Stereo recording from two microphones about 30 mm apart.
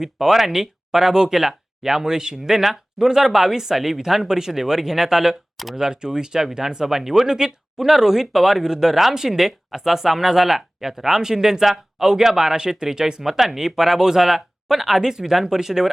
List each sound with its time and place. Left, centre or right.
0.0 s speech: centre
5.7 s speech: right
13.4 s speech: centre